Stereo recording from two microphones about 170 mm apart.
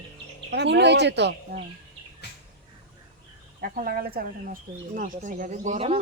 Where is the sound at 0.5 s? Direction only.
90° right.